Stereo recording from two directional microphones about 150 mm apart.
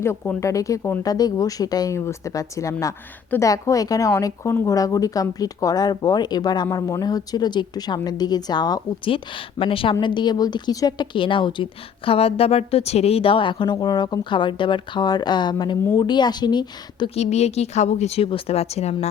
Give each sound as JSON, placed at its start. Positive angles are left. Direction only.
{"t": 0.0, "sound": "speech", "side_deg": 15}
{"t": 17.2, "sound": "a woman's voice", "side_deg": 45}